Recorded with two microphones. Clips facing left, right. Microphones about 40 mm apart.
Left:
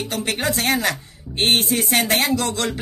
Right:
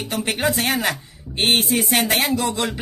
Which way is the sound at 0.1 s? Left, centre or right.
Right.